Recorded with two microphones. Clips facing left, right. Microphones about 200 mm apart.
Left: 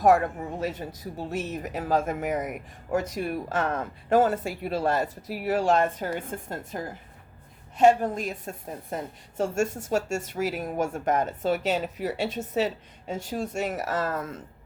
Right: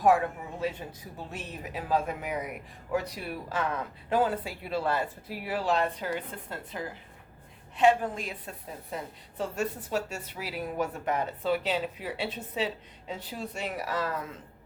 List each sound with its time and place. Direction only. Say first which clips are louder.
0.6 s a woman's voice: even; 40° left (ahead or behind)